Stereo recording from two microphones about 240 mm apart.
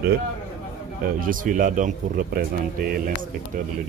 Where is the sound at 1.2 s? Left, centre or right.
Right.